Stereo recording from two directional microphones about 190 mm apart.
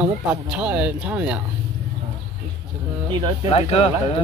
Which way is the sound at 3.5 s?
35° left (ahead or behind).